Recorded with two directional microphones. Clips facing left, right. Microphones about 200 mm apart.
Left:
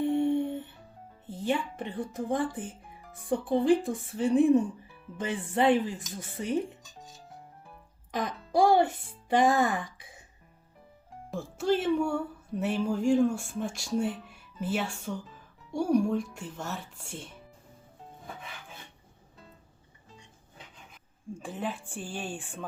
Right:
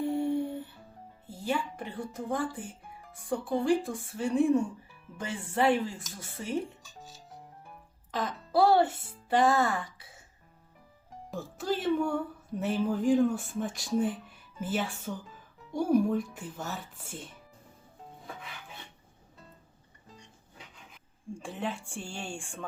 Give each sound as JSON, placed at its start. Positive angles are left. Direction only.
{"t": 0.1, "sound": "music", "side_deg": 25}
{"t": 1.3, "sound": "speech", "side_deg": 20}
{"t": 8.1, "sound": "speech", "side_deg": 15}
{"t": 11.3, "sound": "speech", "side_deg": 0}
{"t": 21.3, "sound": "speech", "side_deg": 0}